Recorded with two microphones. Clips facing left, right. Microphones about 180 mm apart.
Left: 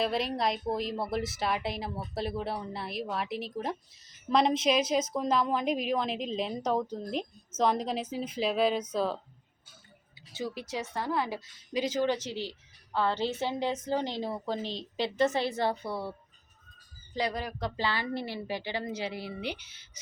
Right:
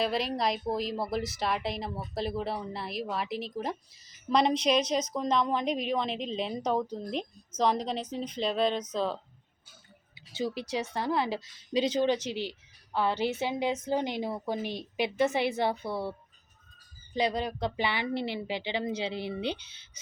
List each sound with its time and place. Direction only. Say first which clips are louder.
0.0 s a woman's voice: even; centre (ahead or behind)
10.9 s a woman's voice: right 1 dB; 25° right (ahead or behind)
17.2 s speech: right 3 dB; 20° right (ahead or behind)